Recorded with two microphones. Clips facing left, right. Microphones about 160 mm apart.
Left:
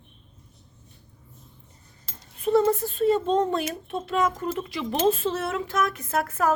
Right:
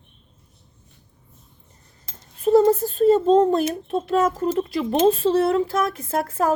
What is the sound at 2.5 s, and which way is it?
A child's voice, 35° right (ahead or behind).